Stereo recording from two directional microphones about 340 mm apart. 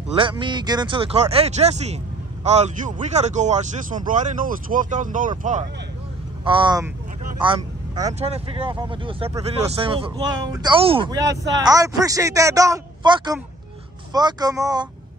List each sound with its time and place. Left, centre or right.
0.1 s speech: centre